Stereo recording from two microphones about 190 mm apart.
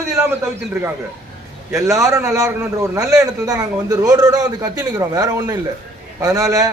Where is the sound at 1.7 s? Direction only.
15° right (ahead or behind).